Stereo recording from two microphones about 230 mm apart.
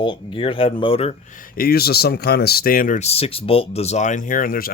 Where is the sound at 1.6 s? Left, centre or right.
Left.